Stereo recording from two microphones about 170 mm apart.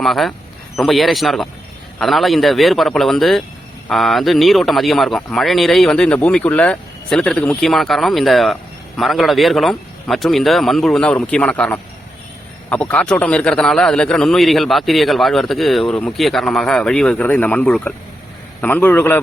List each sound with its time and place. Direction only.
0.0 s a man's voice: centre (ahead or behind)